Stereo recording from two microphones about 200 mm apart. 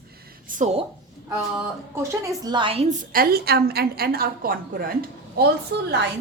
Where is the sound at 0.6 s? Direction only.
35° right (ahead or behind).